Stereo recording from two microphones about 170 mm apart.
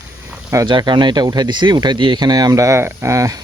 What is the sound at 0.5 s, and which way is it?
Speech, 25° right (ahead or behind).